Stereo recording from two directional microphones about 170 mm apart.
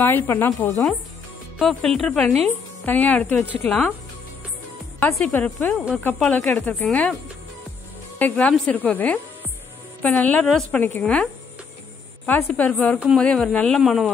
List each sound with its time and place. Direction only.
0.0 s a woman's voice: 15° left (ahead or behind)
1.6 s a woman's voice: centre (ahead or behind)
5.2 s a woman's voice: 10° left (ahead or behind)
8.2 s a woman's voice: 10° left (ahead or behind)
12.3 s a woman's voice: 10° left (ahead or behind)